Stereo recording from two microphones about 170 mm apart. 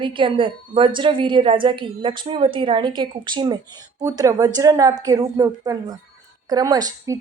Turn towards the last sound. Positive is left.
turn(degrees=-20)  # may be behind; listen again after turning